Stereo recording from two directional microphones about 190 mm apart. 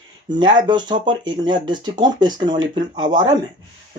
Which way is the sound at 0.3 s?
25° right (ahead or behind).